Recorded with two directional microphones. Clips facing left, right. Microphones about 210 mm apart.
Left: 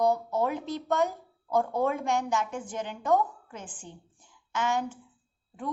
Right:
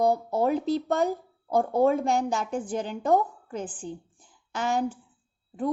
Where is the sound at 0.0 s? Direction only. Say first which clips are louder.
Right 2 dB; 30° right (ahead or behind).